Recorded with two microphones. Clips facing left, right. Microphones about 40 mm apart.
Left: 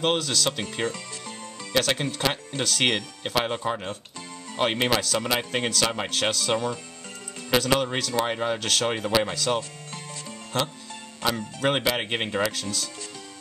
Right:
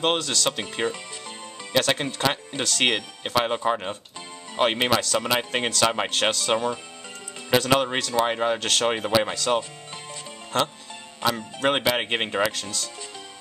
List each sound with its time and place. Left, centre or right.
0.0 s speech: centre